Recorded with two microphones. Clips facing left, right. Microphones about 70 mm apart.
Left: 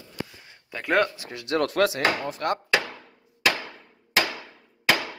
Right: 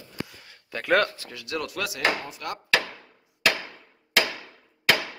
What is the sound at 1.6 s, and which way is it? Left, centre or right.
Speech, left.